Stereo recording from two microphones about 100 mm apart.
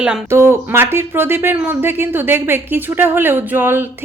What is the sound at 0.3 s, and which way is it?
Speech, 25° right (ahead or behind).